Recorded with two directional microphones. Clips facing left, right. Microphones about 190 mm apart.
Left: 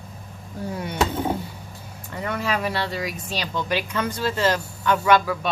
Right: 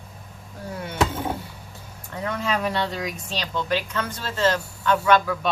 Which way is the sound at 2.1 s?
5° left (ahead or behind).